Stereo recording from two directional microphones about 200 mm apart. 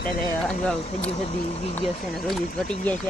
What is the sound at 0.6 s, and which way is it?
Speech, 5° left (ahead or behind).